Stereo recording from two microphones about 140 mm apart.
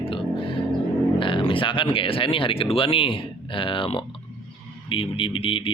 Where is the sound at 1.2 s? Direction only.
35° left (ahead or behind).